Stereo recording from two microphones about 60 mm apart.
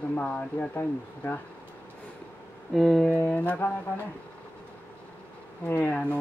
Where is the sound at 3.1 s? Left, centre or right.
Left.